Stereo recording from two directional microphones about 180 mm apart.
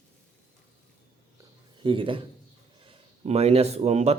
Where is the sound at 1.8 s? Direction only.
30° right (ahead or behind).